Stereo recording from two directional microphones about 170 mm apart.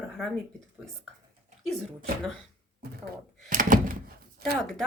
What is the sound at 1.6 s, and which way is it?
Speech, 5° left (ahead or behind).